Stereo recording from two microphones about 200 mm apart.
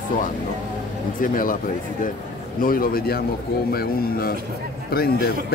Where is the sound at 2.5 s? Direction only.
45° left (ahead or behind).